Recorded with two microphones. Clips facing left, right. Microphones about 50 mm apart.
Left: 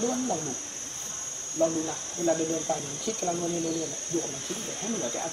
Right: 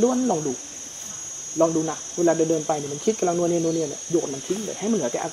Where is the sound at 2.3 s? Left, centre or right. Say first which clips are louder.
Right 8 dB; right.